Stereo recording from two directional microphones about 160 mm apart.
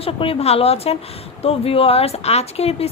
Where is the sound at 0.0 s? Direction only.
35° left (ahead or behind).